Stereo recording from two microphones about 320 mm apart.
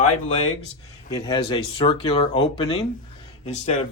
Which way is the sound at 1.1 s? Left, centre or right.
Centre.